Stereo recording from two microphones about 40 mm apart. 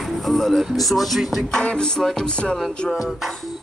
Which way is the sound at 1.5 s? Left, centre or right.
Centre.